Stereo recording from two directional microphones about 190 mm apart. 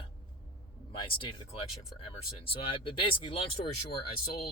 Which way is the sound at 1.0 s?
25° left (ahead or behind).